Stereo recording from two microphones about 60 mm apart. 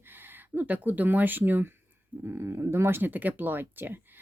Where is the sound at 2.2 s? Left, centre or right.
Right.